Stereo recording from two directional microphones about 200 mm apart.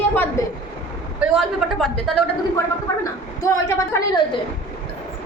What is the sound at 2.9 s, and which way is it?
A woman's voice, 15° left (ahead or behind).